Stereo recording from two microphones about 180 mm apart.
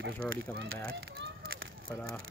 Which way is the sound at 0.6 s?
90° right.